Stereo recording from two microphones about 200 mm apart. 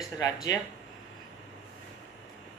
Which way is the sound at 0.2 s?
20° left (ahead or behind).